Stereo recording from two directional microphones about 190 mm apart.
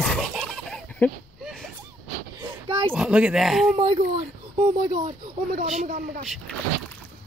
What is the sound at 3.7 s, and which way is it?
Speech, 35° right (ahead or behind).